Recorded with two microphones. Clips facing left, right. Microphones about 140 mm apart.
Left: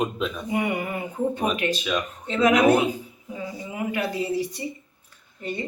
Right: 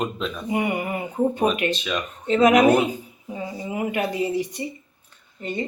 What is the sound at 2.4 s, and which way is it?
Speech, 15° right (ahead or behind).